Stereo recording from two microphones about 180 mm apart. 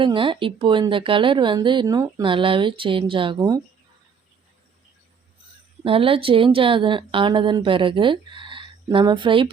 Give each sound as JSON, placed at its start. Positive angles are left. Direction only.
{"t": 0.0, "sound": "a woman's voice", "side_deg": -30}
{"t": 5.8, "sound": "a woman's voice", "side_deg": -30}